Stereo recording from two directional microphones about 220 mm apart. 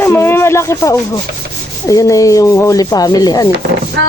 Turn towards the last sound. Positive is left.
turn(degrees=-55)  # may be behind; listen again after turning